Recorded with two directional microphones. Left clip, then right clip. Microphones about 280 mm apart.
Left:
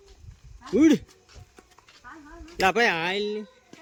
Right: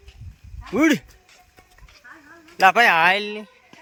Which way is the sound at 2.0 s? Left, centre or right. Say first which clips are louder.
Even; centre.